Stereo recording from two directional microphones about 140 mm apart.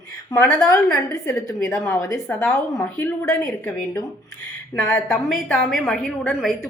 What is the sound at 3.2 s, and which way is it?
A woman's voice, 25° left (ahead or behind).